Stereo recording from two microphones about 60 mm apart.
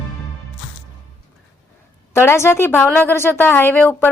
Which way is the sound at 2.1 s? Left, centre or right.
Left.